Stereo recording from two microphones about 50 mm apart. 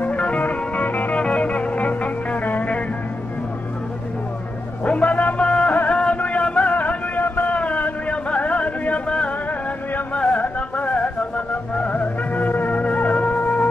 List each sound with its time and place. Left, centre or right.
0.1 s music: left
4.8 s music: left